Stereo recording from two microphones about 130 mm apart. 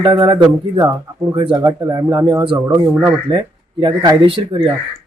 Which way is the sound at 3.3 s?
35° right (ahead or behind).